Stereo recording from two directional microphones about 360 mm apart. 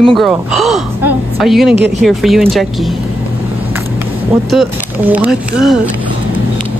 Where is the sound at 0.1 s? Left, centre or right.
Centre.